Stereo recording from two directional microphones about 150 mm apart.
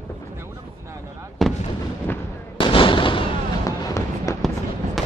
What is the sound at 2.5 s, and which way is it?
Fireworks, 35° left (ahead or behind).